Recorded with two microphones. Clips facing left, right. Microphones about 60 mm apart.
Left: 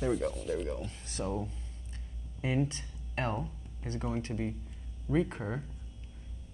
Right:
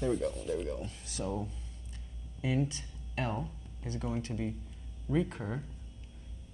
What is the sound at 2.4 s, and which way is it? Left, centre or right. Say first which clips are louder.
Speech: left 1 dB; left.